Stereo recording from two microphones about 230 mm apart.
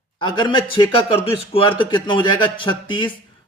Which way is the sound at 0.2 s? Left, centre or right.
Left.